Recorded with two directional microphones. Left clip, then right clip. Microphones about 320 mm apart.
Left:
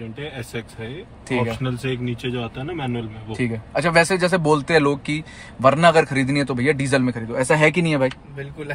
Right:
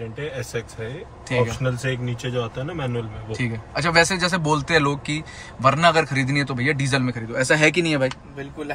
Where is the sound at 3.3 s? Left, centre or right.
Centre.